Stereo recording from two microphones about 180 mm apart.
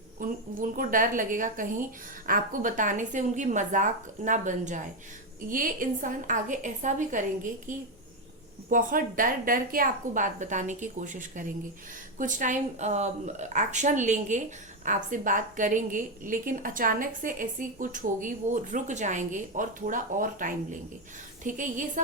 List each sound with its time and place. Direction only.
0.2 s a woman's voice: 50° right (ahead or behind)